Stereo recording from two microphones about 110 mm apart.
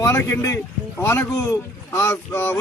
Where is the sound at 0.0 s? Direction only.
25° left (ahead or behind).